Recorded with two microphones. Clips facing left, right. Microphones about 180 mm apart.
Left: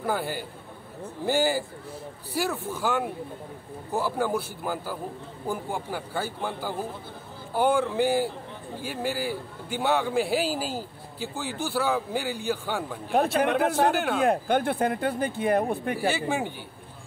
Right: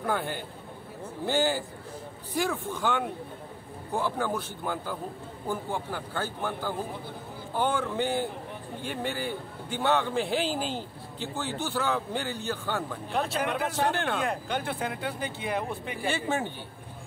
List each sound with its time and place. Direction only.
0.0 s a man's voice: 5° left (ahead or behind)
13.1 s speech: 55° left (ahead or behind)
13.9 s a man's voice: 5° left (ahead or behind)
14.2 s speech: 50° left (ahead or behind)
16.1 s a man's voice: 10° left (ahead or behind)